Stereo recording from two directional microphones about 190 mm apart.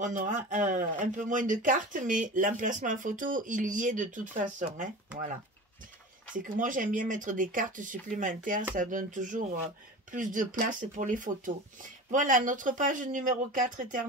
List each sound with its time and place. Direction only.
0.0 s speech: 40° right (ahead or behind)
6.3 s speech: 45° right (ahead or behind)